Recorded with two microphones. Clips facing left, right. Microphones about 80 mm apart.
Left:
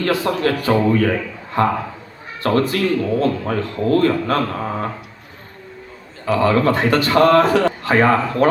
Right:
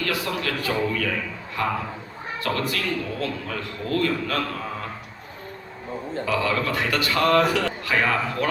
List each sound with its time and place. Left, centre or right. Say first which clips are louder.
0.0 s a man's voice: left 8 dB; left
6.2 s a man's voice: left 9 dB; left